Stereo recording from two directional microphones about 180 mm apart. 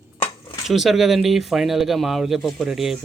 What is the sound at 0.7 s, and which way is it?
Speech, centre (ahead or behind).